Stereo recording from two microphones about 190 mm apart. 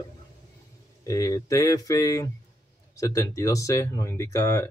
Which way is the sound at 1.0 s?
15° left (ahead or behind).